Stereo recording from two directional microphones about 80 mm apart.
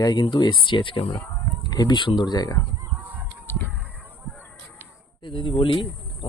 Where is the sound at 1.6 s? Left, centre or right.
Left.